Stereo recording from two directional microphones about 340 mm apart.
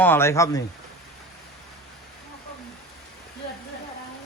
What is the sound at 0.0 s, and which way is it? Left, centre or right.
Speech, centre.